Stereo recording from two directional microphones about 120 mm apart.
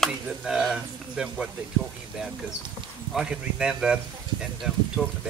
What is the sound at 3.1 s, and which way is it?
Speech, 5° right (ahead or behind).